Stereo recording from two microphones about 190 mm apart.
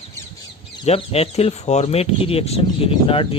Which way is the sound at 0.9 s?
30° left (ahead or behind).